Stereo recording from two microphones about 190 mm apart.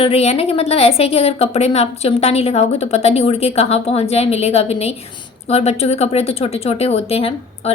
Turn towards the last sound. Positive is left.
turn(degrees=30)  # may be behind; listen again after turning